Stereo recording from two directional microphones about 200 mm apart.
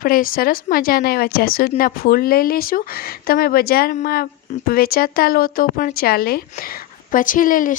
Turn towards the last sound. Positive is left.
turn(degrees=45)  # may be behind; listen again after turning